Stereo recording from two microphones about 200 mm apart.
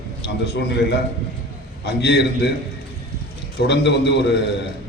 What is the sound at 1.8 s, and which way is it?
Speech, 60° left (ahead or behind).